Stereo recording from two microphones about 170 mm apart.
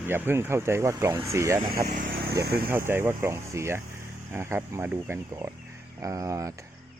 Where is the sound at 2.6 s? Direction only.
15° right (ahead or behind).